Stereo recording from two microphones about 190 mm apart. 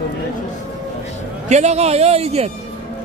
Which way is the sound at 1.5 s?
35° right (ahead or behind).